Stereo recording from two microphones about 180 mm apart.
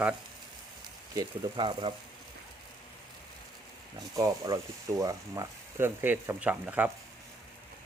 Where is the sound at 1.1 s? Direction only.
25° right (ahead or behind).